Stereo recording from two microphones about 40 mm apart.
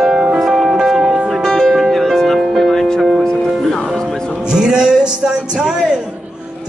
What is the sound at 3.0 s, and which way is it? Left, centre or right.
Music, centre.